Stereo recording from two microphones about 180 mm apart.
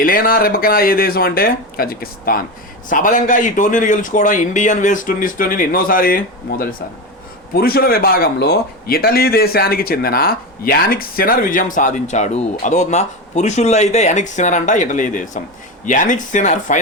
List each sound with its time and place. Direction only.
0.0 s a man's voice: 55° left (ahead or behind)